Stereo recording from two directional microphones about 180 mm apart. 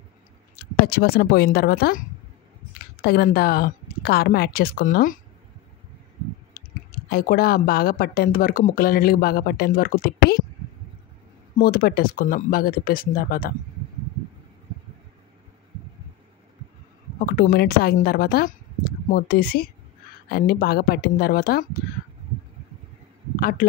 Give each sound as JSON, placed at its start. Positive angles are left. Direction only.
{"t": 0.6, "sound": "speech", "side_deg": 55}
{"t": 6.5, "sound": "speech", "side_deg": 55}
{"t": 11.5, "sound": "speech", "side_deg": 55}
{"t": 17.3, "sound": "speech", "side_deg": 55}